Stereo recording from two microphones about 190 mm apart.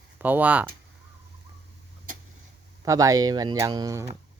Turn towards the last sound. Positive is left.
turn(degrees=-20)  # may be behind; listen again after turning